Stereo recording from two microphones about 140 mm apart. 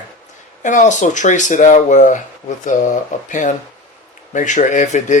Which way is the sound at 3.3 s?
60° left (ahead or behind).